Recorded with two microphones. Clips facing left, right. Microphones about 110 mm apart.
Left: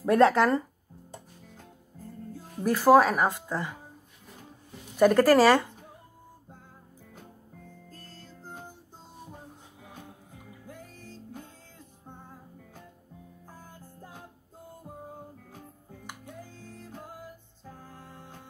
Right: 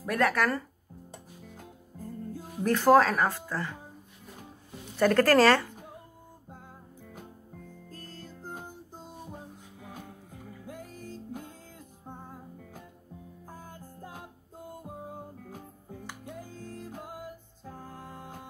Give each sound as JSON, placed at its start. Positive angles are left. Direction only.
{"t": 0.0, "sound": "speech", "side_deg": 25}
{"t": 2.3, "sound": "music", "side_deg": -10}
{"t": 2.6, "sound": "speech", "side_deg": 10}
{"t": 4.9, "sound": "speech", "side_deg": 10}
{"t": 10.7, "sound": "music", "side_deg": -10}
{"t": 16.6, "sound": "music", "side_deg": -10}